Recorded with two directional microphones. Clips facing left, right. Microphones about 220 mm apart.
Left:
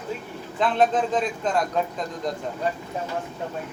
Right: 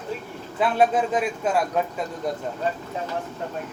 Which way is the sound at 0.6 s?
10° right (ahead or behind).